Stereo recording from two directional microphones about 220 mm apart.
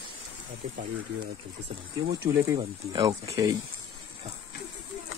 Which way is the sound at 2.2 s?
20° right (ahead or behind).